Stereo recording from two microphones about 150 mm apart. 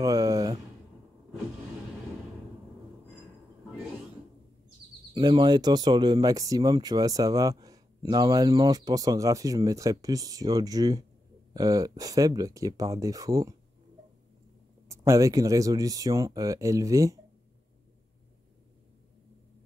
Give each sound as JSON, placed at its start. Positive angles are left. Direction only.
{"t": 0.0, "sound": "a sound", "side_deg": -25}
{"t": 5.1, "sound": "speech", "side_deg": -30}
{"t": 14.9, "sound": "speech", "side_deg": -20}